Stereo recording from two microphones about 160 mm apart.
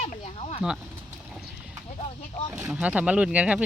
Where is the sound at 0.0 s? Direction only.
45° left (ahead or behind).